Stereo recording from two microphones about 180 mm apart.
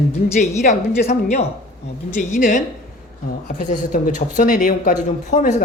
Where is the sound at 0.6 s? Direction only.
40° left (ahead or behind).